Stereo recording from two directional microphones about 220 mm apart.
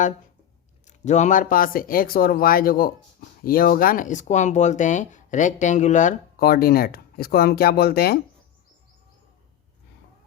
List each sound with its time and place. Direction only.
0.9 s speech: 30° left (ahead or behind)